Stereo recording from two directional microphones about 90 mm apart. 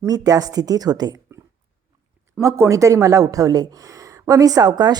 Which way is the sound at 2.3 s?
30° right (ahead or behind).